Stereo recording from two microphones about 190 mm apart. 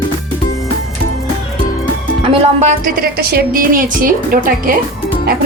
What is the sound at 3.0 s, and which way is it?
A woman's voice, 55° right (ahead or behind).